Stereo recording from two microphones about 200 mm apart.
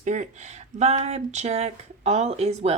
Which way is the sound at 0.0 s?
35° right (ahead or behind).